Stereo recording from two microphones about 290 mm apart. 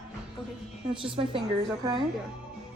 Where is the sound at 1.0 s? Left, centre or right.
Centre.